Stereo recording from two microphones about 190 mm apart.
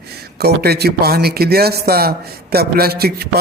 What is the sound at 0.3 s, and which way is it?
A man's voice, 55° right (ahead or behind).